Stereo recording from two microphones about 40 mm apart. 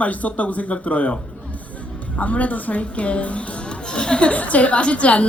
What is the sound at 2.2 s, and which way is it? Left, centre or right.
Speech, left.